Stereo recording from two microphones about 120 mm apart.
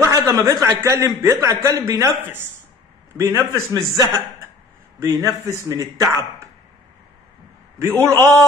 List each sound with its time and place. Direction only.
0.0 s a man's voice: 25° right (ahead or behind)
8.0 s a man's voice: 25° right (ahead or behind)